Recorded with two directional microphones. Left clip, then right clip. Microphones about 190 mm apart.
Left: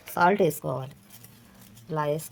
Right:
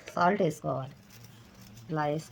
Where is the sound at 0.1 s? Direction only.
55° left (ahead or behind).